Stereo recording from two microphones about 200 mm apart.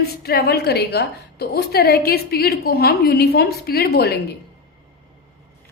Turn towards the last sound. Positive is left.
turn(degrees=55)  # may be behind; listen again after turning